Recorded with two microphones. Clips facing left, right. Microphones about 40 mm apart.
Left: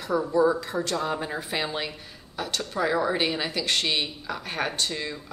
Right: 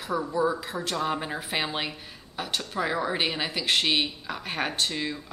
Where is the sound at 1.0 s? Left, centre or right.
Centre.